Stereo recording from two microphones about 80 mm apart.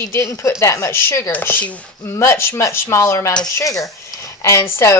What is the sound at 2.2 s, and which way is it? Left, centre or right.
Speech, left.